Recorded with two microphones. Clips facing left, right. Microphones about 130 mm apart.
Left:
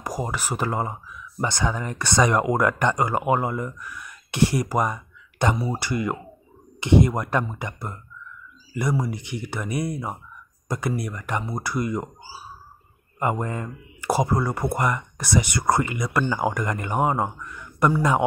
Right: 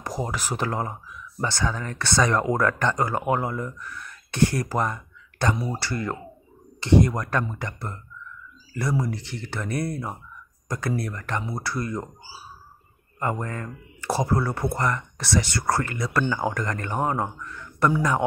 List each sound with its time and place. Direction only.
0.0 s speech: 5° left (ahead or behind)
9.0 s speech: 20° left (ahead or behind)
13.2 s speech: 20° left (ahead or behind)